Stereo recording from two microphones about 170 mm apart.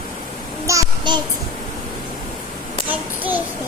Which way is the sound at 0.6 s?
20° right (ahead or behind).